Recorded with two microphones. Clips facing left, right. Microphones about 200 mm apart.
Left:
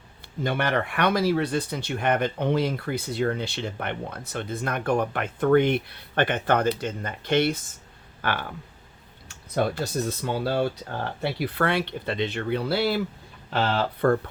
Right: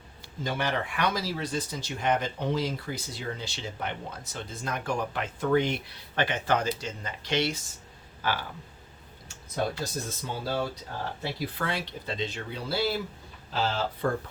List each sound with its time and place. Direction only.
0.4 s speech: 60° left (ahead or behind)